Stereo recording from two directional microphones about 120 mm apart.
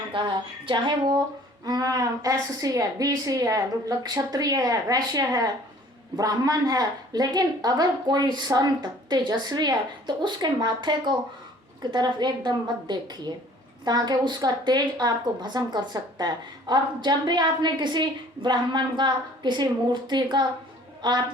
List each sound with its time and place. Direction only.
0.1 s a woman's voice: 40° right (ahead or behind)